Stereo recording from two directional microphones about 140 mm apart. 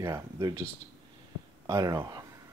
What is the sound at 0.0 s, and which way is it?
Speech, 25° right (ahead or behind).